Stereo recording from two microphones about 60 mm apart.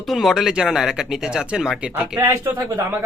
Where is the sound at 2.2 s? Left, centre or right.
Right.